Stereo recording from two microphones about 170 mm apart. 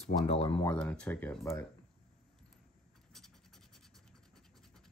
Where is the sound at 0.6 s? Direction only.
5° left (ahead or behind).